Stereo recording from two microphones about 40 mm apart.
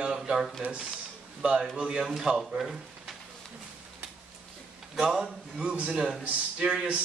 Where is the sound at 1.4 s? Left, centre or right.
Centre.